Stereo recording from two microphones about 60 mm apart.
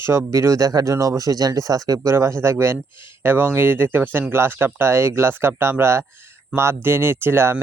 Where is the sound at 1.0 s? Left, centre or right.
Right.